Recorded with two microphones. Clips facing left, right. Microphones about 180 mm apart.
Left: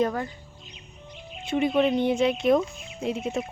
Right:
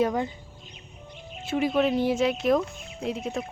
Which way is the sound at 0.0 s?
15° right (ahead or behind).